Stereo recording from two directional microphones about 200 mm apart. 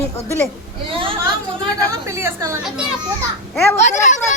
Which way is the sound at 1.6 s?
15° right (ahead or behind).